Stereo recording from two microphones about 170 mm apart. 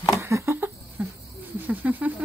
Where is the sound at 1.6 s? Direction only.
10° right (ahead or behind).